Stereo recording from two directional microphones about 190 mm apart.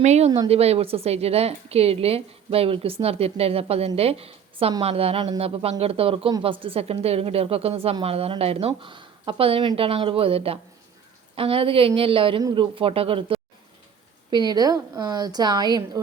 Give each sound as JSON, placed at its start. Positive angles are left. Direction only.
{"t": 0.0, "sound": "a woman's voice", "side_deg": -35}